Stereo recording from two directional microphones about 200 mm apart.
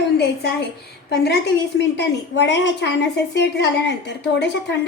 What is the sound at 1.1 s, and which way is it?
A woman's voice, 55° left (ahead or behind).